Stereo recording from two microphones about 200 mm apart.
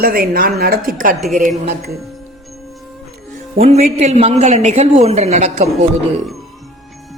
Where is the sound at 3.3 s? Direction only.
35° right (ahead or behind).